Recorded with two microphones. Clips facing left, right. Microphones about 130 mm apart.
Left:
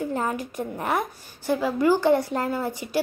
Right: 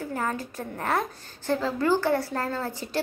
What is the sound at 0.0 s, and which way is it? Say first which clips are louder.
A woman's voice: left 3 dB; 20° left (ahead or behind).